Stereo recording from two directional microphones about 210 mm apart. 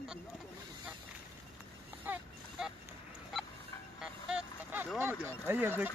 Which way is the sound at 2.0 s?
5° right (ahead or behind).